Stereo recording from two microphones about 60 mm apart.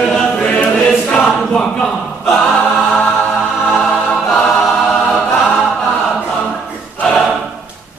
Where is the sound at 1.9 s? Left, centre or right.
Centre.